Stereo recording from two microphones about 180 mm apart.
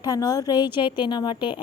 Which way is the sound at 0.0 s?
20° left (ahead or behind).